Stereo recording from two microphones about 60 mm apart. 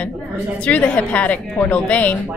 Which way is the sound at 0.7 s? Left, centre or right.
Left.